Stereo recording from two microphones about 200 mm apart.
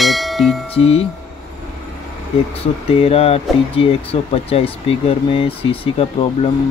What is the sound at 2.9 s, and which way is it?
Speech, 30° left (ahead or behind).